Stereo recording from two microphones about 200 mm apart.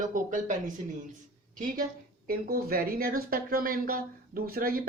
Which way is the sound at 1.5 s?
45° right (ahead or behind).